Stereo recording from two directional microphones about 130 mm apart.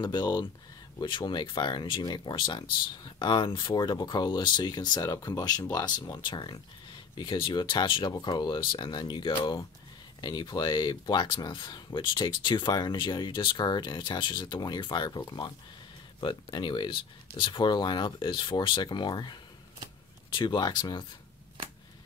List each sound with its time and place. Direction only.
0.0 s speech: 35° left (ahead or behind)
20.3 s speech: 35° left (ahead or behind)